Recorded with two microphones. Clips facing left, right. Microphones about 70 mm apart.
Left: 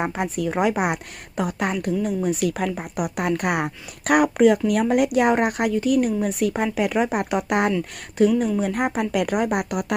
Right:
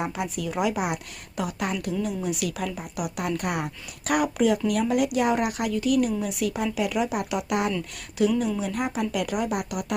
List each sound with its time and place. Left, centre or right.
0.0 s speech: left
1.7 s a woman's voice: left
2.0 s speech: left